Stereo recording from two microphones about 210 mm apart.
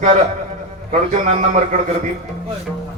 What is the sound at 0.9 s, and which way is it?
Speech, 35° right (ahead or behind).